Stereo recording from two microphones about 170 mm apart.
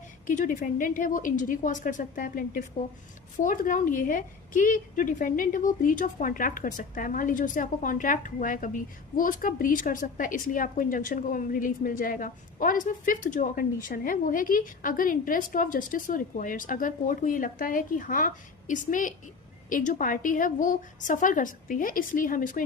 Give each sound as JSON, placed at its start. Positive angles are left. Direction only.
{"t": 0.3, "sound": "a woman's voice", "side_deg": 50}